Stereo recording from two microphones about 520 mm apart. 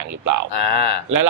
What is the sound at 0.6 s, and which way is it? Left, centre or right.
Speech, left.